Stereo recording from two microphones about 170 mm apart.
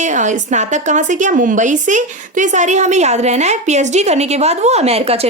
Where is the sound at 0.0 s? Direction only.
45° right (ahead or behind).